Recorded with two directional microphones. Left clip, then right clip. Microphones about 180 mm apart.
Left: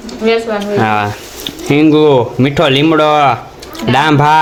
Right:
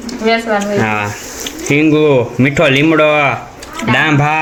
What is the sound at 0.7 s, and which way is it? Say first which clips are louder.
Speech: left 3 dB; 15° left (ahead or behind).